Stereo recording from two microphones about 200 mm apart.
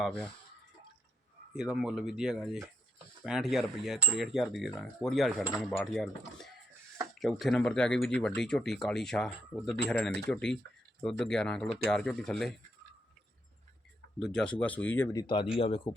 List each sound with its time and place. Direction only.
0.0 s speech: 5° left (ahead or behind)
1.5 s speech: 5° right (ahead or behind)
14.2 s speech: 5° left (ahead or behind); by 15.9 s 25° left (ahead or behind)